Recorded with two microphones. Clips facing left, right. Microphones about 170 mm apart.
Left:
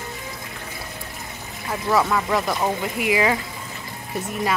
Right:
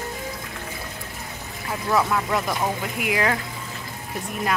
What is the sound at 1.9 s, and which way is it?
A woman's voice, centre (ahead or behind).